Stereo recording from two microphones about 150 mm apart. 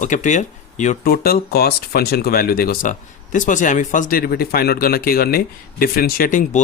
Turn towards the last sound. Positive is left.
turn(degrees=60)  # may be behind; listen again after turning